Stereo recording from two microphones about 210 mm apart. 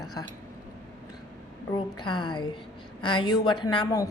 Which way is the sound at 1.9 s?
20° left (ahead or behind).